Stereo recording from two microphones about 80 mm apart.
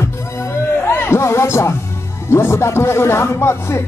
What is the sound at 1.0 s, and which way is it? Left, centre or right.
Music, left.